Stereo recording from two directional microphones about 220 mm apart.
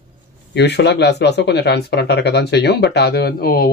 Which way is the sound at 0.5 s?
50° left (ahead or behind).